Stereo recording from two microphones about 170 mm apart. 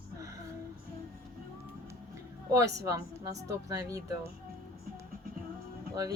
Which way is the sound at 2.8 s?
20° right (ahead or behind).